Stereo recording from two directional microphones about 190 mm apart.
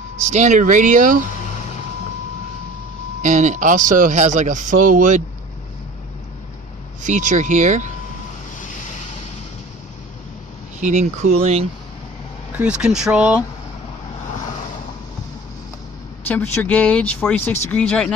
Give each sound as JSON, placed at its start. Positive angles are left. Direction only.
{"t": 0.2, "sound": "speech", "side_deg": -40}
{"t": 3.2, "sound": "speech", "side_deg": -40}
{"t": 7.0, "sound": "speech", "side_deg": -40}
{"t": 10.8, "sound": "speech", "side_deg": -35}
{"t": 12.5, "sound": "speech", "side_deg": -5}
{"t": 16.3, "sound": "speech", "side_deg": 10}